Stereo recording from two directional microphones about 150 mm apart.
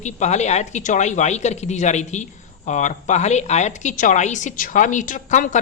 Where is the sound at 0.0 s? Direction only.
50° left (ahead or behind).